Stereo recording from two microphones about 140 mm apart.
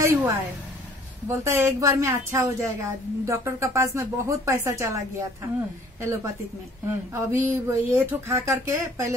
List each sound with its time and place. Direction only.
0.0 s a woman's voice: 15° right (ahead or behind)
1.4 s a woman's voice: 20° right (ahead or behind)